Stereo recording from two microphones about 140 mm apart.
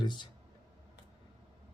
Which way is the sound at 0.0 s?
35° left (ahead or behind).